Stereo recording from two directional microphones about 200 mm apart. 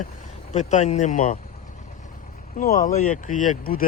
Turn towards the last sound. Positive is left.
turn(degrees=45)  # may be behind; listen again after turning